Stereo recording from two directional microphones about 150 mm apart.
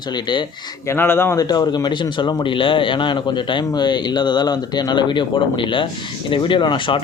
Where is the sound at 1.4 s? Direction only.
25° left (ahead or behind).